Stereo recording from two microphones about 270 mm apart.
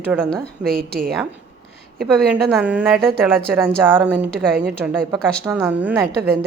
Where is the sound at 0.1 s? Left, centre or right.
Centre.